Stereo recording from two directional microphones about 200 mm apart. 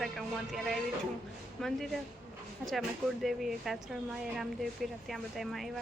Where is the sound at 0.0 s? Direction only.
Centre (ahead or behind).